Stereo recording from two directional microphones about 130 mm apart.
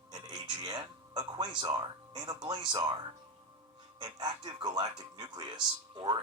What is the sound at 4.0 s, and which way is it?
Speech, 30° right (ahead or behind).